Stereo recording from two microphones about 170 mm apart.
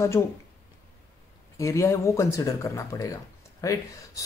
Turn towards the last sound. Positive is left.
turn(degrees=20)  # may be behind; listen again after turning